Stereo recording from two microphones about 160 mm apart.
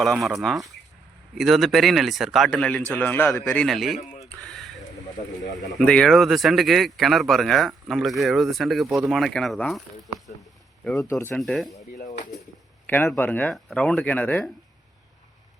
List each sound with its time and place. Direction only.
0.0 s speech: centre (ahead or behind)
4.4 s a sound: centre (ahead or behind)
5.8 s speech: 5° left (ahead or behind)
11.1 s speech: 15° left (ahead or behind)
11.3 s speech: centre (ahead or behind)
11.9 s bird: 60° left (ahead or behind)
12.9 s speech: 10° left (ahead or behind)